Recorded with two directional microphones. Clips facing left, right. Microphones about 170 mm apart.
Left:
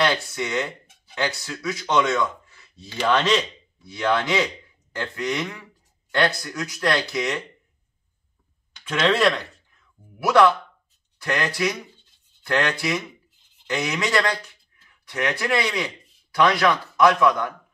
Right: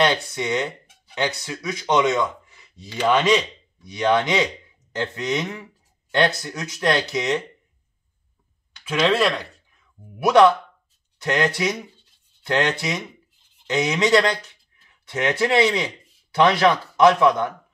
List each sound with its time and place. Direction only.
0.0 s speech: 20° right (ahead or behind)
8.8 s a man's voice: 10° right (ahead or behind)